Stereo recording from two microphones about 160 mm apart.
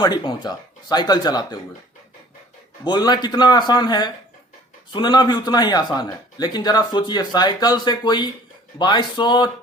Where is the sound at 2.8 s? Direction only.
25° left (ahead or behind).